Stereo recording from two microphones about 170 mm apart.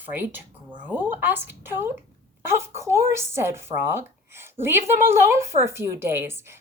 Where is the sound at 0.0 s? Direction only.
10° right (ahead or behind).